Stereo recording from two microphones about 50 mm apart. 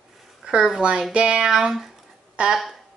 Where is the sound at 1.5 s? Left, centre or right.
Centre.